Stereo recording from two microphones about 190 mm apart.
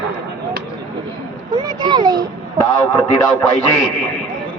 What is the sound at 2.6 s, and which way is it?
Speech, 15° left (ahead or behind).